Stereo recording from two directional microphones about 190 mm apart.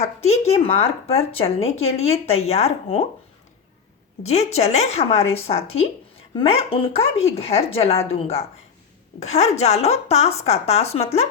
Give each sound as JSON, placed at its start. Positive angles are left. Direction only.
{"t": 0.3, "sound": "speech", "side_deg": 35}
{"t": 4.2, "sound": "speech", "side_deg": 35}